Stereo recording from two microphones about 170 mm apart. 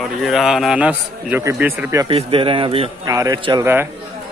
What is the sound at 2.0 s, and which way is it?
Speech, 30° right (ahead or behind).